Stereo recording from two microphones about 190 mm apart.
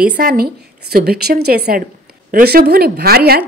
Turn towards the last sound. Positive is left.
turn(degrees=-55)  # may be behind; listen again after turning